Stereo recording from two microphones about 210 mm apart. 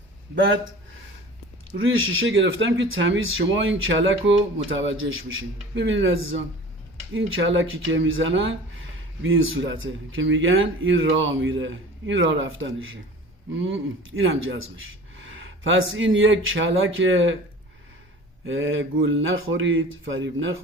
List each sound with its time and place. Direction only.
0.3 s speech: 60° right (ahead or behind)
1.8 s speech: 70° right (ahead or behind)
18.4 s speech: 65° right (ahead or behind)